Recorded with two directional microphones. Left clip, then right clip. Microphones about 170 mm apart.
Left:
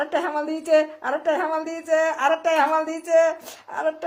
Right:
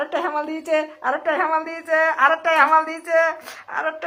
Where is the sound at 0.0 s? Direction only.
45° left (ahead or behind).